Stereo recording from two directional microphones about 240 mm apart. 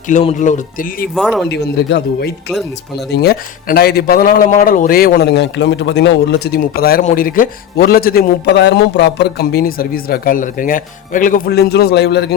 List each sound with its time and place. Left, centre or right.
0.1 s speech: left
1.1 s speech: centre
1.5 s speech: left